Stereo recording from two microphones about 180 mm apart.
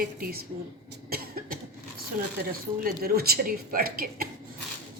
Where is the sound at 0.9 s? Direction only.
55° right (ahead or behind).